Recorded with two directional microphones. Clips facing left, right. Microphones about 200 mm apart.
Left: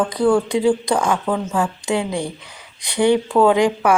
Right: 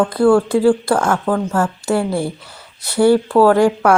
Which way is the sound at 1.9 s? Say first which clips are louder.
Right 3 dB; 15° left (ahead or behind).